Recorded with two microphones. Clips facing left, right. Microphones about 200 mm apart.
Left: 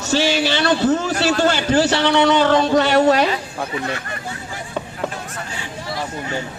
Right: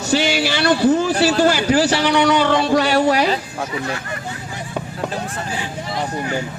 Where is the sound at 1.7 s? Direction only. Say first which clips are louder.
Even; 25° left (ahead or behind).